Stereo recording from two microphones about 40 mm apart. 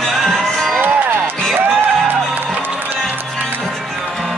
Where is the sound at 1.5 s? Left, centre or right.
Right.